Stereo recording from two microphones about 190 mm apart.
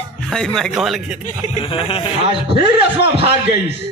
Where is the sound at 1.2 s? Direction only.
35° left (ahead or behind).